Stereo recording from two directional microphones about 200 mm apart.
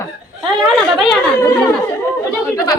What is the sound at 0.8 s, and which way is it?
Speech, centre (ahead or behind).